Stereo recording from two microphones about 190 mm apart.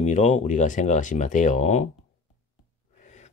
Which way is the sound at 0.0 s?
40° left (ahead or behind).